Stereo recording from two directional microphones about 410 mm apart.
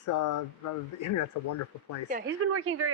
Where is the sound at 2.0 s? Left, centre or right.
Right.